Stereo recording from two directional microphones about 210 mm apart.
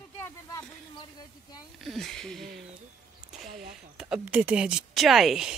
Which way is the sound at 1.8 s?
Centre (ahead or behind).